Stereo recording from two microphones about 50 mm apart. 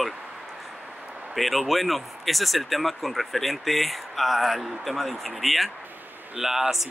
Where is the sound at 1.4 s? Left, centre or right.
Centre.